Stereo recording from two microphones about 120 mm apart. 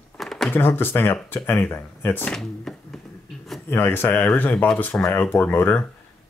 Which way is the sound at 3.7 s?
20° left (ahead or behind).